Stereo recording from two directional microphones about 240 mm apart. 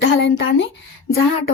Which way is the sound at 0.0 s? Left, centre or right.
Left.